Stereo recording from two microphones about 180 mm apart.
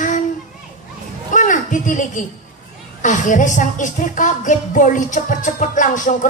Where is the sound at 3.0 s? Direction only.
45° left (ahead or behind).